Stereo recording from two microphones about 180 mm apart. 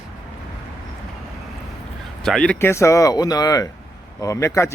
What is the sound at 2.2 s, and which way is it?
A man's voice, 5° left (ahead or behind).